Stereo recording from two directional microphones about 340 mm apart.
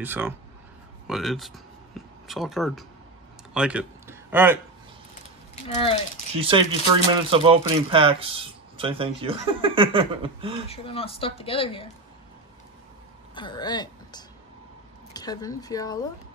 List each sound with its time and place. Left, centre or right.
0.0 s speech: centre
6.3 s speech: centre
10.7 s speech: centre
13.3 s speech: centre